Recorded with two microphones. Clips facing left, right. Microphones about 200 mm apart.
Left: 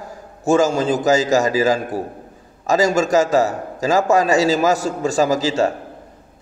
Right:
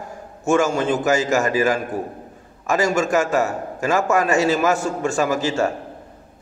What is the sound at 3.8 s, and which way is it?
A man's voice, 35° left (ahead or behind).